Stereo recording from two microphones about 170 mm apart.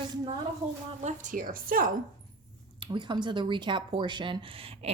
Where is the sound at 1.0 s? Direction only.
50° right (ahead or behind).